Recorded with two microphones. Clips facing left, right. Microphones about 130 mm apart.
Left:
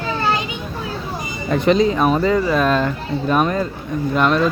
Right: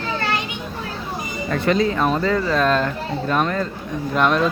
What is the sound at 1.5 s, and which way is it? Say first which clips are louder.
Speech: left 4 dB; 20° left (ahead or behind).